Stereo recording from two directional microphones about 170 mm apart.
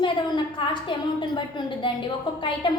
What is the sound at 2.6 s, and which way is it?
Speech, 30° left (ahead or behind).